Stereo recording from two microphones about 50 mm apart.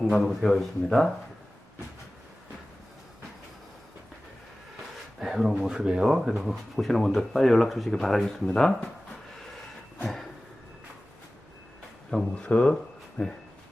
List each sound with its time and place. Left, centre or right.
0.0 s speech: centre
5.2 s speech: centre
5.5 s speech: centre
10.0 s train: centre
12.3 s speech: left